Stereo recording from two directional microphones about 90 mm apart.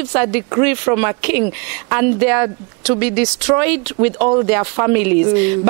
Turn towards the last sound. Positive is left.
turn(degrees=-15)  # may be behind; listen again after turning